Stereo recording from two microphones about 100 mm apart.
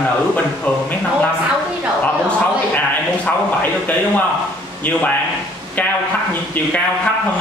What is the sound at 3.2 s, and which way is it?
A man's voice, 15° left (ahead or behind).